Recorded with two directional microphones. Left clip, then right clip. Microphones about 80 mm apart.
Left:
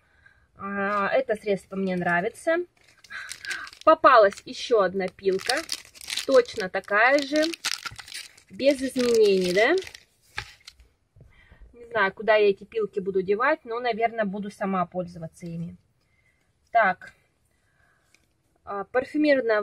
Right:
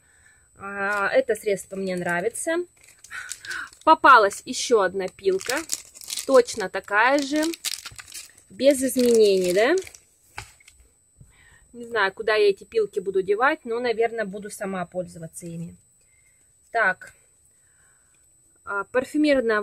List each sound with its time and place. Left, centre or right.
0.6 s speech: right; by 2.6 s centre
3.9 s speech: right
5.7 s crumpling: left
6.3 s speech: right
7.3 s speech: left
8.5 s speech: right
11.3 s a sound: right
12.2 s speech: right
18.7 s speech: right